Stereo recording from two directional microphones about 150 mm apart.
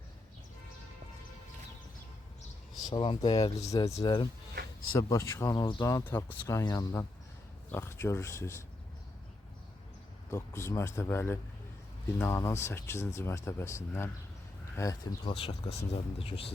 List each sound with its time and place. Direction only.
2.9 s speech: 35° left (ahead or behind)
3.8 s speech: 40° left (ahead or behind)
4.9 s speech: 20° left (ahead or behind)
10.3 s speech: 20° left (ahead or behind)
15.2 s speech: 35° left (ahead or behind)